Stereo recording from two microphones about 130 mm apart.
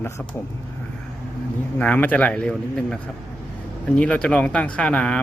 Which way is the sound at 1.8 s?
10° left (ahead or behind).